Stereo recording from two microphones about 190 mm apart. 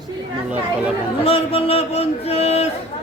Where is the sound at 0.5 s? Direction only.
5° right (ahead or behind).